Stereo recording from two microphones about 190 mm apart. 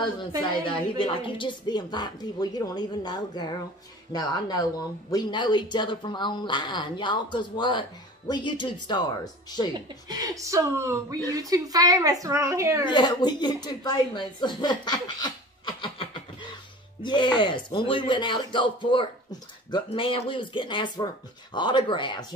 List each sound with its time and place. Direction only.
0.4 s a woman's voice: 25° left (ahead or behind)
10.0 s speech: 15° right (ahead or behind)
12.8 s a woman's voice: 25° left (ahead or behind)